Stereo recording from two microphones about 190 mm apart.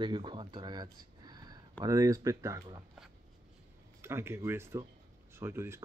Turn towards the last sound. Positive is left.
turn(degrees=-15)  # may be behind; listen again after turning